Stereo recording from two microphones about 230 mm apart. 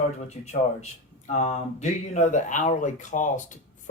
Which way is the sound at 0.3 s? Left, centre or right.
Left.